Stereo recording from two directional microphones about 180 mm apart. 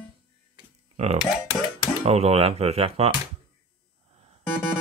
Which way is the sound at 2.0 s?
35° right (ahead or behind).